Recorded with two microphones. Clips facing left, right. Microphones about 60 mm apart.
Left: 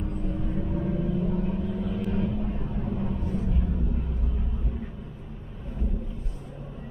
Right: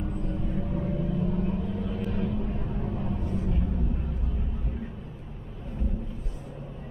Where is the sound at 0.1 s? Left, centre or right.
Centre.